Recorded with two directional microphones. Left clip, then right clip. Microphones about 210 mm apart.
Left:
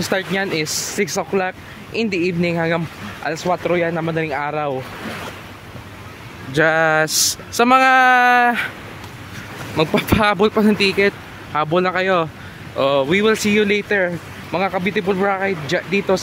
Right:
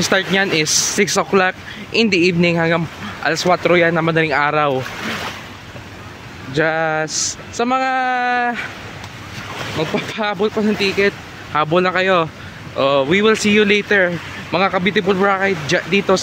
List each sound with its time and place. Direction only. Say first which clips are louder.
0.0 s speech: right 5 dB; 10° right (ahead or behind)
3.4 s speech: right 5 dB; 20° right (ahead or behind)
6.5 s speech: left 2 dB; 15° left (ahead or behind)
9.8 s speech: left 5 dB; 30° left (ahead or behind)
11.5 s speech: right 2 dB; 5° left (ahead or behind)